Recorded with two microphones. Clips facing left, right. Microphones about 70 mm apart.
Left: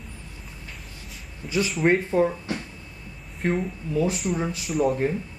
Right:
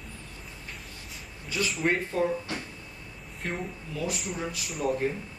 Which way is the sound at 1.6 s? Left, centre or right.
Centre.